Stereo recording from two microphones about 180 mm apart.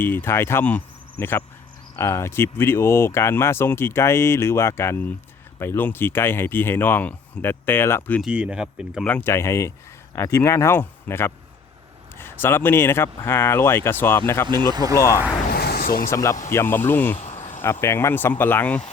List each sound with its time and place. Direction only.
0.0 s speech: 10° left (ahead or behind)
8.2 s speech: 5° right (ahead or behind)
9.0 s speech: 10° left (ahead or behind)
14.4 s speech: 25° right (ahead or behind)
15.4 s a sound: 60° left (ahead or behind)
16.0 s speech: 15° left (ahead or behind)
17.2 s cricket: 45° left (ahead or behind)
17.6 s speech: 15° left (ahead or behind)